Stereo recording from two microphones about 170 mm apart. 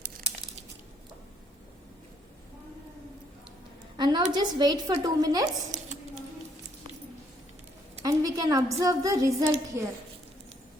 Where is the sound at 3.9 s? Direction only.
25° right (ahead or behind).